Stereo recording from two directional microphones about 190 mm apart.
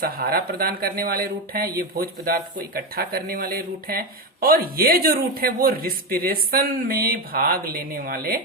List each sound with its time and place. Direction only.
0.0 s speech: 50° right (ahead or behind)